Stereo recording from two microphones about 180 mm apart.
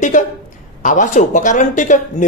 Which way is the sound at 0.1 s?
45° left (ahead or behind).